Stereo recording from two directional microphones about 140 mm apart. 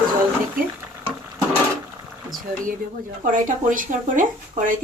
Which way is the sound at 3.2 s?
70° right (ahead or behind).